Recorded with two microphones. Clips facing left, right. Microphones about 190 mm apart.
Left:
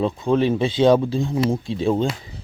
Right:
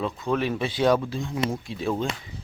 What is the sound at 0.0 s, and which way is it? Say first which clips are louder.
Speech: left 7 dB; 25° left (ahead or behind).